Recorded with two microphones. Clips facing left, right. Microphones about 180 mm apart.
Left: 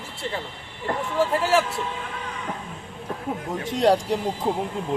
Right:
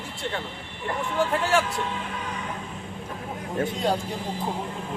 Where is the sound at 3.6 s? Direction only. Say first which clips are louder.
Left 8 dB; 90° left.